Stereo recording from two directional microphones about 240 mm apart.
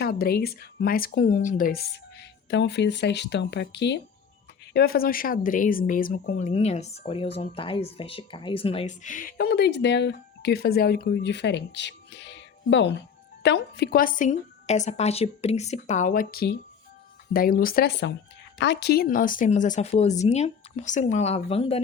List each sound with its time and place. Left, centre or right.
0.0 s speech: left